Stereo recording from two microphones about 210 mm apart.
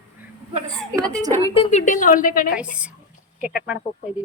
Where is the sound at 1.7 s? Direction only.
35° left (ahead or behind).